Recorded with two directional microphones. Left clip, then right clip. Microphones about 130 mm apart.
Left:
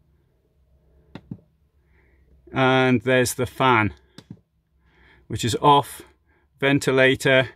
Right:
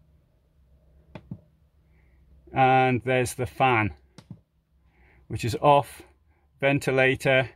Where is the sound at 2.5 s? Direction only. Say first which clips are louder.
Left 1 dB; 30° left (ahead or behind).